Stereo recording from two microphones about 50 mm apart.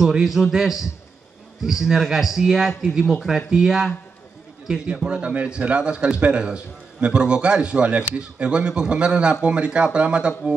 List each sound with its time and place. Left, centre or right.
0.0 s a man's voice: centre
4.8 s a man's voice: right